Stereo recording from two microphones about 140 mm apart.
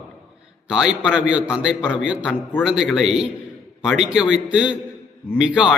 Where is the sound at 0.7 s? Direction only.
5° right (ahead or behind).